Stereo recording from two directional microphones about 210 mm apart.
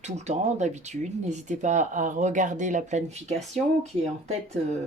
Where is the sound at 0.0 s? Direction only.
35° right (ahead or behind).